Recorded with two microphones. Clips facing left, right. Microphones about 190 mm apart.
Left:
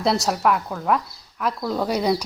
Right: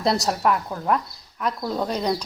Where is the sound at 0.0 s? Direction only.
Centre (ahead or behind).